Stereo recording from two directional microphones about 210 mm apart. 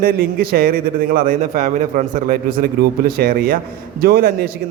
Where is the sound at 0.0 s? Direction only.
45° right (ahead or behind).